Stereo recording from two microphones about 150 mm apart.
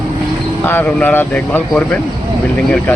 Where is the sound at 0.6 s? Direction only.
15° left (ahead or behind).